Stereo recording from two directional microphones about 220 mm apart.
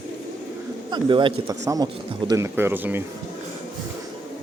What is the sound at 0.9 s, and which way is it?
Speech, 20° right (ahead or behind).